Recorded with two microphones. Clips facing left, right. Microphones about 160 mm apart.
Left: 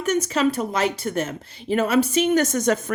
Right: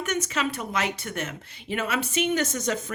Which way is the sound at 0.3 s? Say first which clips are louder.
Left 7 dB; 35° left (ahead or behind).